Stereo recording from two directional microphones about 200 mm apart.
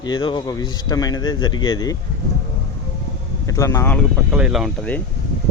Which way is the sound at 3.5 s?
15° left (ahead or behind).